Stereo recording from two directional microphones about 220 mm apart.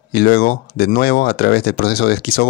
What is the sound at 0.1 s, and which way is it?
Speech, 45° left (ahead or behind).